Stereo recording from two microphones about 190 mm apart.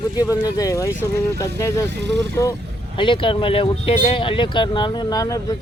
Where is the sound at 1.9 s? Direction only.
65° right (ahead or behind).